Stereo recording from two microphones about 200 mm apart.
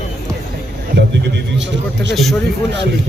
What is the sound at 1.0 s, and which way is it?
A man's voice, 60° right (ahead or behind).